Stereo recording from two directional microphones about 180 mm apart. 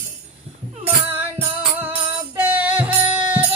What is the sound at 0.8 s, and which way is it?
Music, 10° right (ahead or behind).